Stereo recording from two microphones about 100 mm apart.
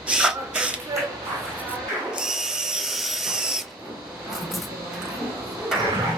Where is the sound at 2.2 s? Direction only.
5° right (ahead or behind).